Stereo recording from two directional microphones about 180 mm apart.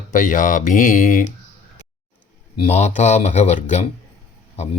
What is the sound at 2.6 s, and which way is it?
Speech, 40° left (ahead or behind).